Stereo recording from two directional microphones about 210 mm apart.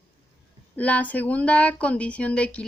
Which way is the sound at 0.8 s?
5° left (ahead or behind).